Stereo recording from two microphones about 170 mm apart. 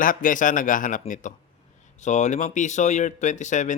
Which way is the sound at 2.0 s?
45° left (ahead or behind).